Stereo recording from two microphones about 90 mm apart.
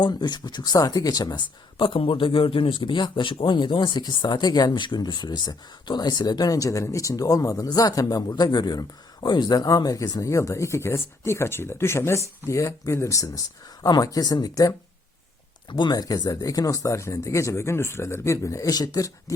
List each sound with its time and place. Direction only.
0.0 s speech: 50° left (ahead or behind)
1.8 s speech: 70° left (ahead or behind); by 14.8 s 40° left (ahead or behind)
15.9 s speech: 45° left (ahead or behind)